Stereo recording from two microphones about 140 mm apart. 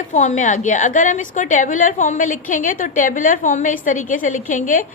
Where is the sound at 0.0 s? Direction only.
60° left (ahead or behind).